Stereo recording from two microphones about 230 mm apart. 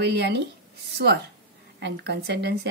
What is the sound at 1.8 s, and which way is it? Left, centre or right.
Speech, right.